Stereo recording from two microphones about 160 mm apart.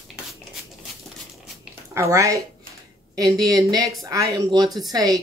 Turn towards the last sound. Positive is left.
turn(degrees=-25)  # may be behind; listen again after turning